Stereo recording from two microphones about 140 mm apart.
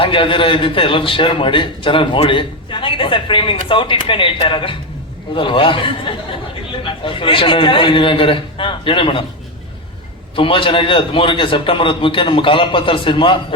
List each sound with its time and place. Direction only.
0.0 s a man's voice: 40° left (ahead or behind)
10.3 s a man's voice: 40° left (ahead or behind)